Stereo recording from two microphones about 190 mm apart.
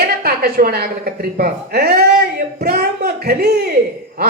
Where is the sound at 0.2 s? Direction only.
55° right (ahead or behind).